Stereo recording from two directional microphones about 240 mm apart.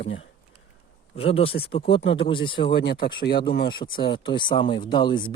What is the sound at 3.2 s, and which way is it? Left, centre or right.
Speech, left.